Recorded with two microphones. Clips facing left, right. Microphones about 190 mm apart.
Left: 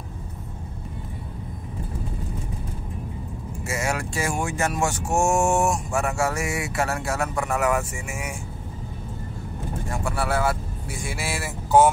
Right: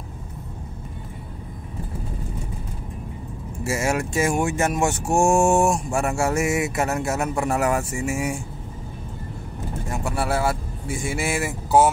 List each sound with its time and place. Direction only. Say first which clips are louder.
3.6 s speech: right 4 dB; 25° right (ahead or behind)
9.8 s speech: right 2 dB; 25° right (ahead or behind)